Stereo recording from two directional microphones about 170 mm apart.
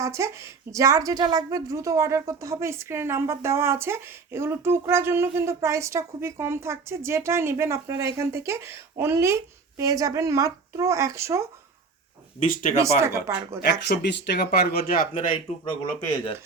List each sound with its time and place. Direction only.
0.0 s a woman's voice: 15° right (ahead or behind)
12.4 s speech: 55° left (ahead or behind)
12.8 s a woman's voice: 15° right (ahead or behind)
13.7 s speech: 75° left (ahead or behind); by 15.3 s 55° left (ahead or behind)